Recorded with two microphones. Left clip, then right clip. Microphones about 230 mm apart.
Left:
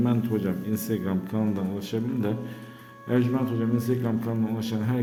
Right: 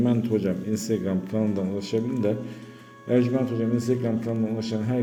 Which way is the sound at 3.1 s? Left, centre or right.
Centre.